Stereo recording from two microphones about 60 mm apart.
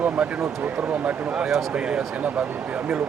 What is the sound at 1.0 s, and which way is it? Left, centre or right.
Speech, right.